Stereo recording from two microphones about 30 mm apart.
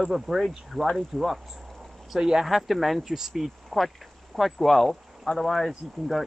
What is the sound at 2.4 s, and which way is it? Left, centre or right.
Speech, centre.